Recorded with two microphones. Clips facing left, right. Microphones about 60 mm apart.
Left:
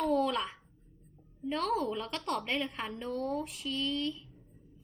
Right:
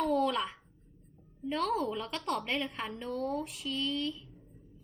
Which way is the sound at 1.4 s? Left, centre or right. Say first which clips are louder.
Even; centre.